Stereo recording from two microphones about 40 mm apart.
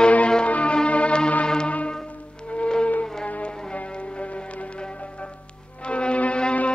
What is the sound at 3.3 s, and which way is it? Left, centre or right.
Music, left.